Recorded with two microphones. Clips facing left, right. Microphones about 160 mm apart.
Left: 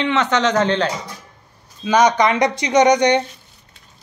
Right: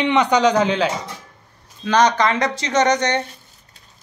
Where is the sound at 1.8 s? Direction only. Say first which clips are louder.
Left 2 dB; 10° left (ahead or behind).